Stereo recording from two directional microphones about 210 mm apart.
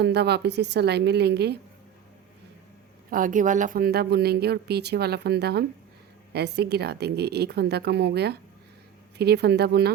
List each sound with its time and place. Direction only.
0.0 s speech: 50° right (ahead or behind)
3.1 s speech: 40° right (ahead or behind)